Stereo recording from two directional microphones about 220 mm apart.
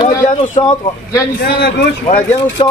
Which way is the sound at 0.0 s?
20° left (ahead or behind).